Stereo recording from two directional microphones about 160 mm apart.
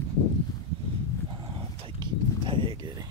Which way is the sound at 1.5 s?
30° right (ahead or behind).